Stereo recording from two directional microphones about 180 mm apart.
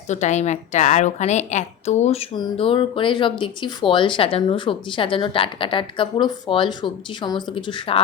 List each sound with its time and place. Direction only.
0.1 s a woman's voice: 40° left (ahead or behind)